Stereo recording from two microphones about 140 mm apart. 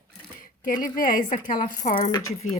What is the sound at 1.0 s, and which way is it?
Speech, 75° left (ahead or behind).